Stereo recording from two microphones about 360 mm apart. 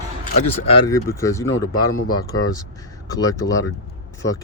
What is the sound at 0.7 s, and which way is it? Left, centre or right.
Speech, centre.